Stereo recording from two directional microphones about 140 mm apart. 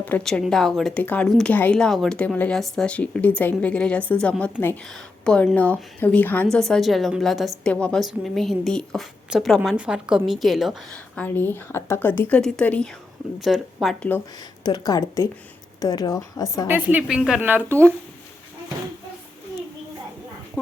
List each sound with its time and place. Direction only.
0.0 s a woman's voice: 10° left (ahead or behind)
13.4 s a woman's voice: centre (ahead or behind)
14.6 s a woman's voice: 25° left (ahead or behind)
16.6 s a woman's voice: 15° right (ahead or behind)